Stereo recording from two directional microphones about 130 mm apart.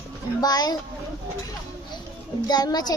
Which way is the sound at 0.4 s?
30° left (ahead or behind).